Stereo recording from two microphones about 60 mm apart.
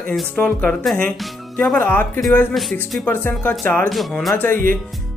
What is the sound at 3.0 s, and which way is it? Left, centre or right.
Music, left.